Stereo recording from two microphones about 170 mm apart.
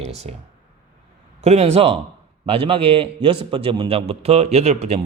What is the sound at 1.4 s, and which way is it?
A man's voice, 40° right (ahead or behind).